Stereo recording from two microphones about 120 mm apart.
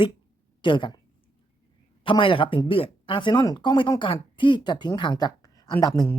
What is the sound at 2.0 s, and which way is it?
Speech, 45° left (ahead or behind).